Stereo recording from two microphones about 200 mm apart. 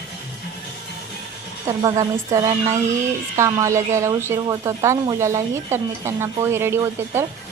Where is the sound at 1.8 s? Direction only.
15° right (ahead or behind).